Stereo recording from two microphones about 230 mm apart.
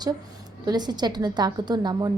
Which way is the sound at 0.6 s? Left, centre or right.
Centre.